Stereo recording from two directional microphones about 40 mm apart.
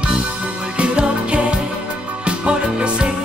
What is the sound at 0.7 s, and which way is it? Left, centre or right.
Music, right.